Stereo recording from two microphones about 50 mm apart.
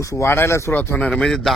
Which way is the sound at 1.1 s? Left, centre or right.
Centre.